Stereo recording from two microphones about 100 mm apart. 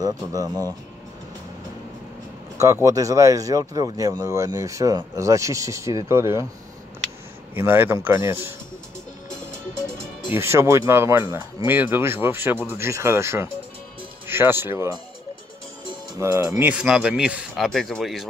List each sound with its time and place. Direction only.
0.0 s speech: 35° right (ahead or behind)
2.6 s speech: 35° right (ahead or behind)
7.5 s speech: 20° right (ahead or behind)
10.3 s speech: 25° right (ahead or behind)
16.2 s speech: 30° right (ahead or behind)
16.6 s speech: 10° right (ahead or behind)